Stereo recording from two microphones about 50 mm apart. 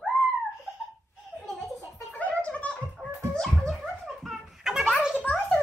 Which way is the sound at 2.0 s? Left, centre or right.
Left.